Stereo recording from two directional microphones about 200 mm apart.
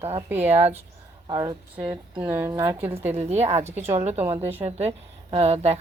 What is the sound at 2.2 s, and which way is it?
Speech, 10° right (ahead or behind).